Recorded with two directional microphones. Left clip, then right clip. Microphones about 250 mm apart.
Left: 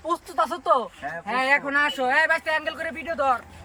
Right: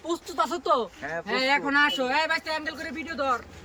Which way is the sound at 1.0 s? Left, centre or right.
Centre.